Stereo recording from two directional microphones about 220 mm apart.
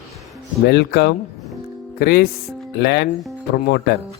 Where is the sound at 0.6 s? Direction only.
45° left (ahead or behind).